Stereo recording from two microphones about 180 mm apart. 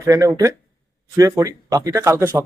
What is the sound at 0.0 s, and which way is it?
Speech, 15° right (ahead or behind).